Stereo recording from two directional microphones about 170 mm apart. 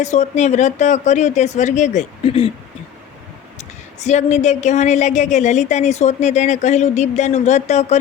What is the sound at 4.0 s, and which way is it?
Speech, 45° left (ahead or behind).